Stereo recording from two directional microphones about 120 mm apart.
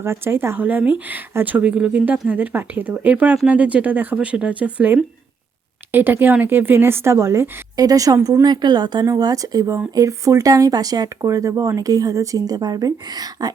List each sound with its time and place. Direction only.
0.0 s speech: 20° right (ahead or behind)